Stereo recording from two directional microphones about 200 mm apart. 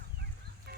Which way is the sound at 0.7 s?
55° right (ahead or behind).